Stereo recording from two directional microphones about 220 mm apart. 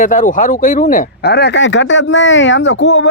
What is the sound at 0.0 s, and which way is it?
Speech, 35° left (ahead or behind).